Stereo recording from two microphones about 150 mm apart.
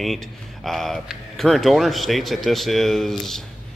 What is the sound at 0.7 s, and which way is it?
A man's voice, centre (ahead or behind).